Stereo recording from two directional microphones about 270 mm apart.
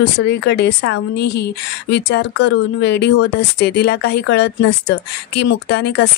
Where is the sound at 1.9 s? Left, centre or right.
Left.